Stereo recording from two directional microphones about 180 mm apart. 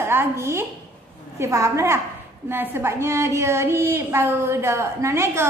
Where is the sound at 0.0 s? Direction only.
15° right (ahead or behind).